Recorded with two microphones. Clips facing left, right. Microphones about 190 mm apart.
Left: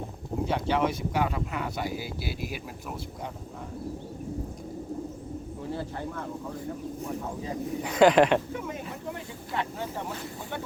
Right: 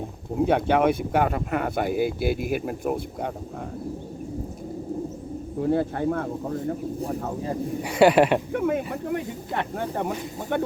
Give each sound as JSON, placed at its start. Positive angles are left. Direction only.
{"t": 0.4, "sound": "speech", "side_deg": -55}
{"t": 5.5, "sound": "speech", "side_deg": -55}
{"t": 7.8, "sound": "speech", "side_deg": -10}
{"t": 8.5, "sound": "speech", "side_deg": -60}